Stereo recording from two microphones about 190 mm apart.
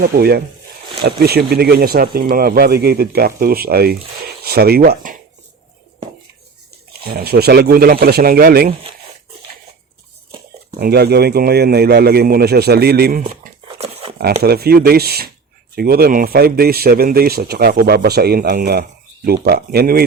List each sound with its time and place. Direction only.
0.0 s speech: 55° right (ahead or behind)
7.1 s a man's voice: 55° right (ahead or behind)
10.8 s speech: 55° right (ahead or behind)
13.2 s a sound: 35° right (ahead or behind)
14.4 s a man's voice: 55° right (ahead or behind)